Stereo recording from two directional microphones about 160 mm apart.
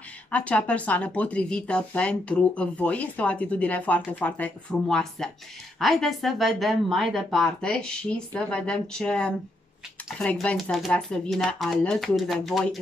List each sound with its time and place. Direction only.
0.3 s speech: 10° left (ahead or behind)